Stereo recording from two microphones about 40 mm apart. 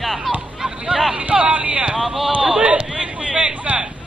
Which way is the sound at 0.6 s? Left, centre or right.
Right.